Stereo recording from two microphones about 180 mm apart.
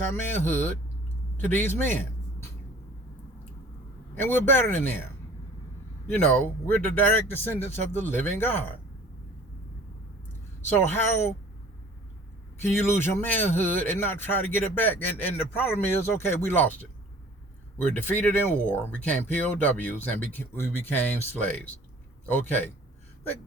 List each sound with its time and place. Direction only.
0.0 s speech: 10° left (ahead or behind)
4.1 s speech: 10° left (ahead or behind)
6.1 s speech: 5° left (ahead or behind)
12.6 s speech: 10° left (ahead or behind)
18.0 s speech: 10° left (ahead or behind)